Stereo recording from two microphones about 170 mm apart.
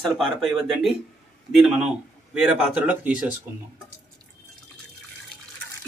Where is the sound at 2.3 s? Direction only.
5° right (ahead or behind).